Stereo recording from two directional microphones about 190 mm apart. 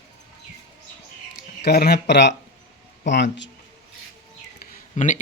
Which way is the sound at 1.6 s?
55° left (ahead or behind).